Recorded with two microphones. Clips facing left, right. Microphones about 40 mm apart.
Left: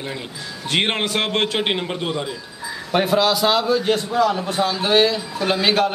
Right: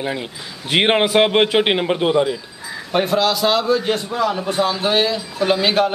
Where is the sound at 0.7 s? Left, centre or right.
Centre.